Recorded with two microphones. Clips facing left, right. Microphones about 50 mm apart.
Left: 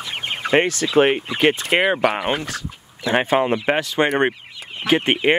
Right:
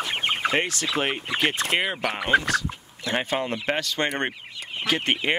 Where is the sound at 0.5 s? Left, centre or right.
Left.